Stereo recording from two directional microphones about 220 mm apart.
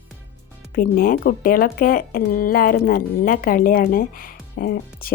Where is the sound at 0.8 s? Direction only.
40° left (ahead or behind).